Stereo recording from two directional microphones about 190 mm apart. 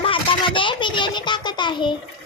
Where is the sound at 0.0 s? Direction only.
25° left (ahead or behind).